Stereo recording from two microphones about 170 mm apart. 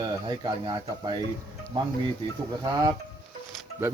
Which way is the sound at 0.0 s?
25° right (ahead or behind).